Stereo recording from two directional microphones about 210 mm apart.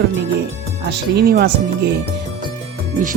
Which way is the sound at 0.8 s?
55° right (ahead or behind).